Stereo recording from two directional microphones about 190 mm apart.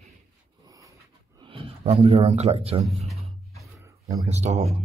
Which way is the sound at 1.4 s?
30° right (ahead or behind).